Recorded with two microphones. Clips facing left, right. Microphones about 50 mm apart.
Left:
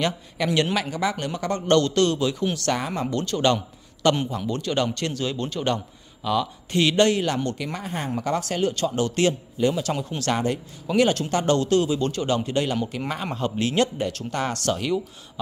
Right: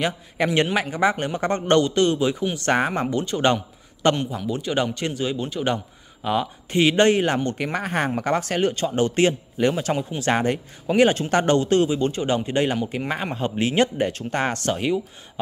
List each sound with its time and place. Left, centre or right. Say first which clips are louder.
0.4 s speech: right 2 dB; right
1.8 s speech: right 1 dB; centre
2.7 s speech: right 9 dB; right
3.1 s speech: right 1 dB; centre
4.3 s speech: right 1 dB; centre
6.2 s speech: right 1 dB; right
7.5 s speech: right 6 dB; right
8.2 s speech: left 1 dB; right
9.9 s speech: right 3 dB; centre
10.3 s speech: right 3 dB; right
10.9 s speech: right 3 dB; right
11.2 s speech: right 3 dB; right
11.5 s speech: right 2 dB; right